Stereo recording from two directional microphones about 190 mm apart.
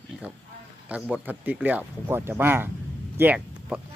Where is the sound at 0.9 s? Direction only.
5° right (ahead or behind).